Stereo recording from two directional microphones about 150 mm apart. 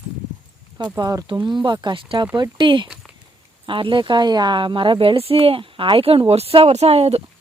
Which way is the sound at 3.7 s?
35° right (ahead or behind).